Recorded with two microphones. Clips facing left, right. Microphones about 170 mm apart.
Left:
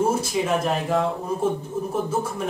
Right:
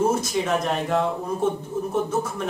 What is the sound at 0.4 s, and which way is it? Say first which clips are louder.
Speech: left 1 dB; 5° left (ahead or behind).